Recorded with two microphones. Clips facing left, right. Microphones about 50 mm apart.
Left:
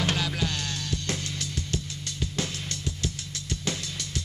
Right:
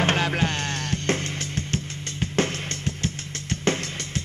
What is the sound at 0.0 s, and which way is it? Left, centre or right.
Music, right.